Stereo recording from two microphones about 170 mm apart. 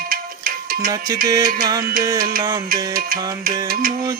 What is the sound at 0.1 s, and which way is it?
Music, 60° right (ahead or behind).